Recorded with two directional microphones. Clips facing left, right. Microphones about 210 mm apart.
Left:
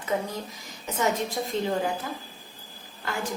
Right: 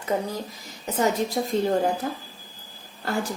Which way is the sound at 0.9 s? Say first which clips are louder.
Right 3 dB; 40° right (ahead or behind).